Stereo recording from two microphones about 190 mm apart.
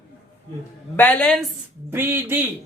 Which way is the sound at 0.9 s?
10° left (ahead or behind).